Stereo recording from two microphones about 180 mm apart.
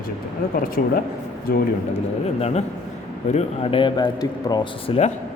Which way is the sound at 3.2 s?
35° left (ahead or behind).